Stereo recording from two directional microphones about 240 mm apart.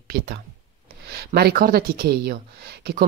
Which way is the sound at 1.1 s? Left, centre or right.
Right.